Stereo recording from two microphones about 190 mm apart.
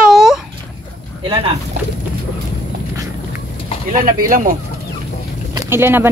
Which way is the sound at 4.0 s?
45° right (ahead or behind).